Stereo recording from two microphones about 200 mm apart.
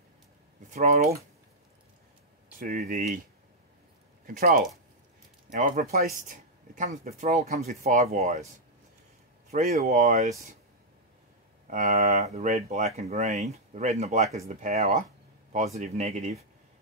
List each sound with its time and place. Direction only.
0.7 s speech: 35° right (ahead or behind)
2.6 s speech: 45° right (ahead or behind)
4.3 s speech: 45° right (ahead or behind)
9.5 s speech: 35° right (ahead or behind)
11.6 s speech: 35° right (ahead or behind)